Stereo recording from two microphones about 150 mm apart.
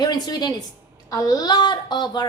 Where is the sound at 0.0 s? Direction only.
25° left (ahead or behind).